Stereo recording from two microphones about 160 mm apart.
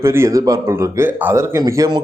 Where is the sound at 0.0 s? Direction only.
15° right (ahead or behind).